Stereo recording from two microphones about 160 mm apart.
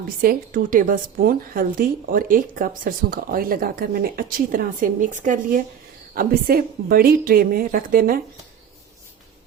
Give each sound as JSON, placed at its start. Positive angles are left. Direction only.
{"t": 0.2, "sound": "a woman's voice", "side_deg": -60}
{"t": 6.1, "sound": "a woman's voice", "side_deg": -65}